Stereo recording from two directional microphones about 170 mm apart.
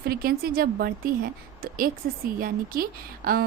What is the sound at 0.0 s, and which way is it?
A woman's voice, 60° right (ahead or behind).